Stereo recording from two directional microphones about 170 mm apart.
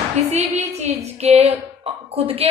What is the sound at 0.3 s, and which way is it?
A woman's voice, 40° right (ahead or behind).